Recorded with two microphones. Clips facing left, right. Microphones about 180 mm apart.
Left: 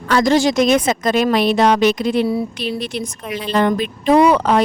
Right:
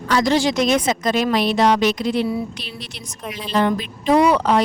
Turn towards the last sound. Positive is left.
turn(degrees=55)  # may be behind; listen again after turning